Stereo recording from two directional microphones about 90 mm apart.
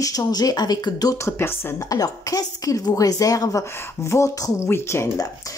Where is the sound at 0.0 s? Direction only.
45° left (ahead or behind).